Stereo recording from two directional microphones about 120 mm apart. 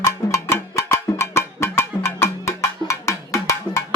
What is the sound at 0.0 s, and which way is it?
Music, 25° left (ahead or behind).